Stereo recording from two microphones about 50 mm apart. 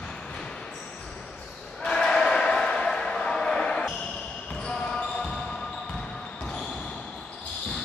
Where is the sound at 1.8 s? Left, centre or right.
Centre.